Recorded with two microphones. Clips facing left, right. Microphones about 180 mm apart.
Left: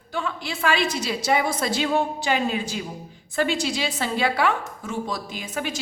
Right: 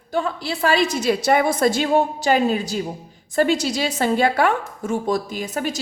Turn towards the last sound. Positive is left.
turn(degrees=-40)  # may be behind; listen again after turning